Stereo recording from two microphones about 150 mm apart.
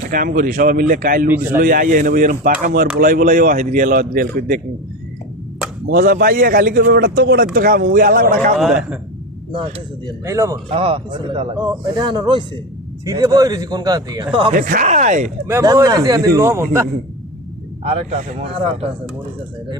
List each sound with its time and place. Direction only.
0.1 s a man's voice: 70° right (ahead or behind)
5.9 s a man's voice: 75° right (ahead or behind)
8.5 s a man's voice: centre (ahead or behind)
9.5 s speech: 35° right (ahead or behind)
10.2 s a man's voice: 20° right (ahead or behind)
10.5 s a man's voice: 40° right (ahead or behind)
14.5 s a man's voice: 65° right (ahead or behind)
15.4 s a man's voice: 20° right (ahead or behind)
18.3 s speech: 40° right (ahead or behind)